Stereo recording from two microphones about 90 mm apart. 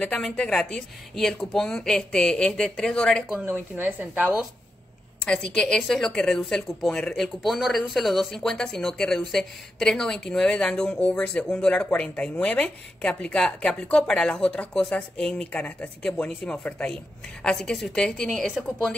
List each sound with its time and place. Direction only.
0.0 s speech: 10° left (ahead or behind)
3.4 s a woman's voice: 25° right (ahead or behind)
5.2 s a woman's voice: 10° left (ahead or behind)